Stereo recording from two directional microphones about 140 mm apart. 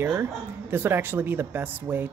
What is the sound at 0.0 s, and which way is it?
Speech, 15° right (ahead or behind).